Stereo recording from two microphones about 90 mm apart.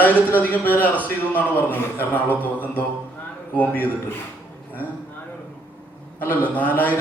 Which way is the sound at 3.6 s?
20° left (ahead or behind).